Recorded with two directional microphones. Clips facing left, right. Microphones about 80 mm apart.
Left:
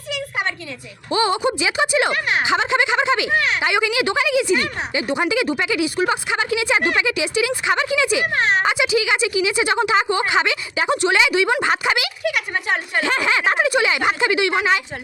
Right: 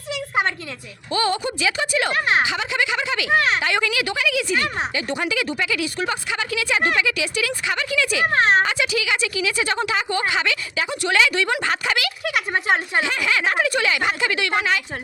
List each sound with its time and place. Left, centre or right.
1.1 s a woman's voice: centre
2.1 s speech: right
2.4 s a woman's voice: left
3.6 s speech: centre
4.0 s a woman's voice: left
8.3 s speech: right
8.6 s a woman's voice: centre
12.2 s speech: right
13.1 s a woman's voice: left